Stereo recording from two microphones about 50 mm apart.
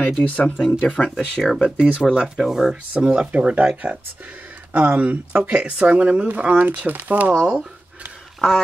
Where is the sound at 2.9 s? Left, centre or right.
Right.